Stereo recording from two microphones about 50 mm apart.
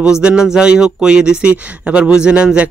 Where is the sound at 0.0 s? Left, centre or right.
Centre.